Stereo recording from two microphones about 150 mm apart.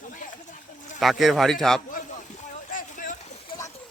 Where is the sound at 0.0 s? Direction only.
60° left (ahead or behind).